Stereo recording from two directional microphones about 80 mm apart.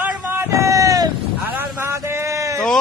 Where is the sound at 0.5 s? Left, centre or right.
Right.